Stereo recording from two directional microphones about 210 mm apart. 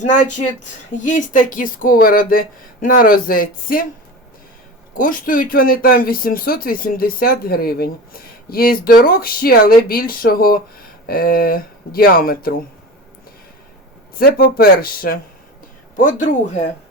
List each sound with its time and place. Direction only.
0.0 s speech: 35° left (ahead or behind)
4.9 s speech: 40° left (ahead or behind)
14.2 s speech: 45° left (ahead or behind)